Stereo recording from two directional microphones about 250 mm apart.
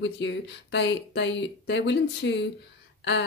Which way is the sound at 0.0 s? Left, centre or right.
Left.